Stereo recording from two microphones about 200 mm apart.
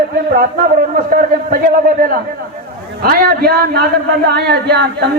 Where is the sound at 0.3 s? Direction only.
45° right (ahead or behind).